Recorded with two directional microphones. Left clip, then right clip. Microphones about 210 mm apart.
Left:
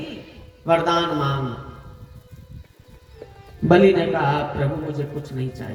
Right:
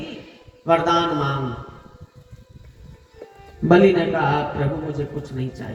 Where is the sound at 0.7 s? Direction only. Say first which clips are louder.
Right 1 dB; 35° left (ahead or behind).